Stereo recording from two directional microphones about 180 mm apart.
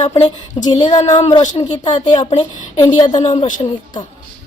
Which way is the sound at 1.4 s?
40° left (ahead or behind).